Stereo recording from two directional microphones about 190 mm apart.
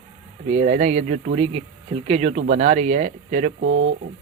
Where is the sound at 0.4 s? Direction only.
40° right (ahead or behind).